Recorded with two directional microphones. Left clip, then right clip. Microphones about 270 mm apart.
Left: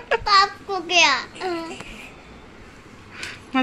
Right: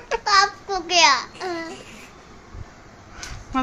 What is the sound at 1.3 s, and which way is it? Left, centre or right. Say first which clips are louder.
Child singing: left 2 dB; right.